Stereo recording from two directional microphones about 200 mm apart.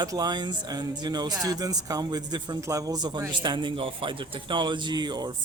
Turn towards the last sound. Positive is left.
turn(degrees=-20)  # may be behind; listen again after turning